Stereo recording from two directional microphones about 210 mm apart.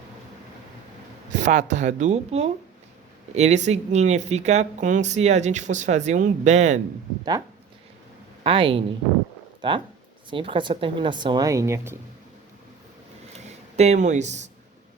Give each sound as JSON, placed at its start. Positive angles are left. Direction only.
{"t": 1.3, "sound": "speech", "side_deg": -35}
{"t": 8.4, "sound": "speech", "side_deg": -25}
{"t": 13.3, "sound": "speech", "side_deg": -30}